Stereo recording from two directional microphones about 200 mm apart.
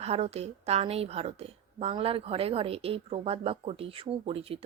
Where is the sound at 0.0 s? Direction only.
30° right (ahead or behind).